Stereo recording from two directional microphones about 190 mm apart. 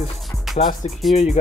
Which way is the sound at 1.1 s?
35° left (ahead or behind).